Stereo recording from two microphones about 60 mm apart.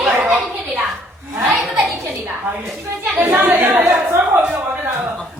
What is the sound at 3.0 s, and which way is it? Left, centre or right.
Chatter, right.